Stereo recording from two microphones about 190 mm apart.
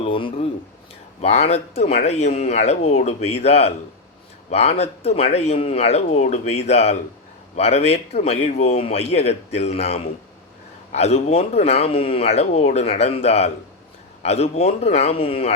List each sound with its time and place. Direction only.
0.0 s a man's voice: 25° left (ahead or behind)